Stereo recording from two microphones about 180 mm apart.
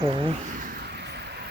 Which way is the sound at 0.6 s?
55° right (ahead or behind).